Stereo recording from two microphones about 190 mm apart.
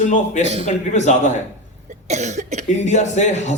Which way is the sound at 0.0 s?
40° left (ahead or behind).